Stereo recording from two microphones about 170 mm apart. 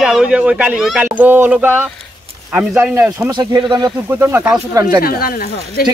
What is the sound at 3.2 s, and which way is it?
Speech, 25° right (ahead or behind).